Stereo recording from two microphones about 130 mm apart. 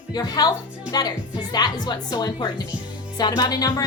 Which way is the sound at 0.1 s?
30° left (ahead or behind).